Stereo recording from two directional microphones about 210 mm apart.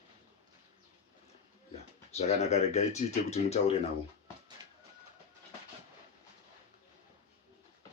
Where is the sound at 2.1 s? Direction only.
30° left (ahead or behind).